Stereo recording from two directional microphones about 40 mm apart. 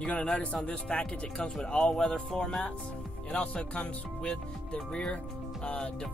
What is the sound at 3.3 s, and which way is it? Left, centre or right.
Speech, left.